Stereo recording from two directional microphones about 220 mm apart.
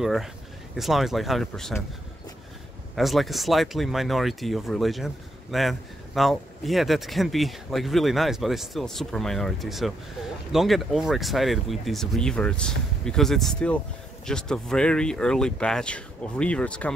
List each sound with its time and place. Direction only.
0.0 s speech: centre (ahead or behind)
3.0 s speech: centre (ahead or behind)